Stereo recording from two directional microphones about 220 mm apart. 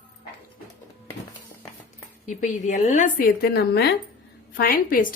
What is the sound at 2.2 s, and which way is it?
A woman's voice, 35° left (ahead or behind).